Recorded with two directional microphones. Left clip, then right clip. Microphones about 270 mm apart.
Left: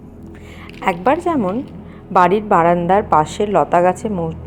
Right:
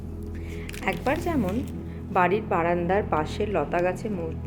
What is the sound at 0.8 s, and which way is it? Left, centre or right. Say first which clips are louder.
A woman's voice: left 11 dB; left.